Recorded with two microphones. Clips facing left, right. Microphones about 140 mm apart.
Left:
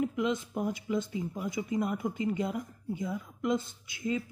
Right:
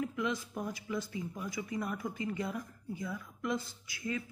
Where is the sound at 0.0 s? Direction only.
20° left (ahead or behind).